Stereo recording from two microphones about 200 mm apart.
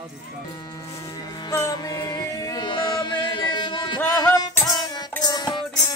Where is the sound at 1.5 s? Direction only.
15° left (ahead or behind).